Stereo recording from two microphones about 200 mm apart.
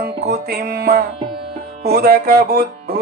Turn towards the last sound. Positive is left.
turn(degrees=-50)  # may be behind; listen again after turning